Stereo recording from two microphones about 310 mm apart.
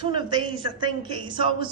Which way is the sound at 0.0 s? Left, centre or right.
Centre.